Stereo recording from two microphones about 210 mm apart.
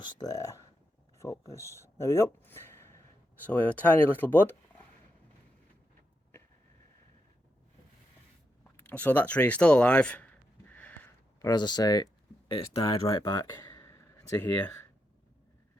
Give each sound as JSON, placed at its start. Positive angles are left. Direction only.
{"t": 0.0, "sound": "speech", "side_deg": 15}
{"t": 8.7, "sound": "speech", "side_deg": 10}
{"t": 10.7, "sound": "a sound", "side_deg": 10}
{"t": 11.4, "sound": "speech", "side_deg": 20}